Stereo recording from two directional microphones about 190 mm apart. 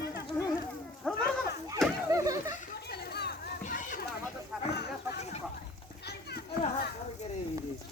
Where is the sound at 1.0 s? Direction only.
5° left (ahead or behind).